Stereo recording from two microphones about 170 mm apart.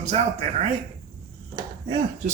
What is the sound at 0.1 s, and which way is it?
Speech, 40° right (ahead or behind).